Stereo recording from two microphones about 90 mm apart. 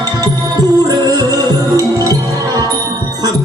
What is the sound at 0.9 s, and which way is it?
Music, 45° right (ahead or behind).